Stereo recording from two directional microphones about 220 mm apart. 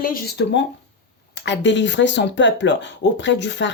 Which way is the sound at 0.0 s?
45° left (ahead or behind).